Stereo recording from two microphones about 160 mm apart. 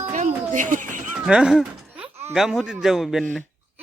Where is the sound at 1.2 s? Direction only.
5° right (ahead or behind).